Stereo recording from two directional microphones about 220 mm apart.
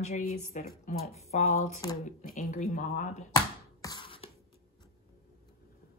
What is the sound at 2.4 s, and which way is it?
Speech, 35° left (ahead or behind).